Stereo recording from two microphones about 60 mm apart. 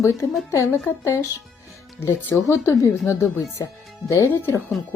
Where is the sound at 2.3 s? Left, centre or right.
Left.